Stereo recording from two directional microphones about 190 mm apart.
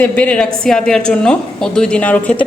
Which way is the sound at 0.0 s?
5° left (ahead or behind).